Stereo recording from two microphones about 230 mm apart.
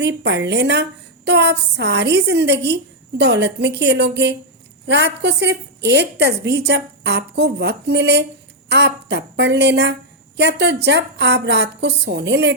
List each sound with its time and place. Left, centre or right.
0.0 s a woman's voice: right